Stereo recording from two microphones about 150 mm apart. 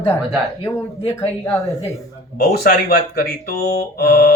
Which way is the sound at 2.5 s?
90° left.